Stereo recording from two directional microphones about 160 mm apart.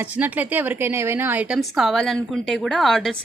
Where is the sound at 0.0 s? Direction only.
10° right (ahead or behind).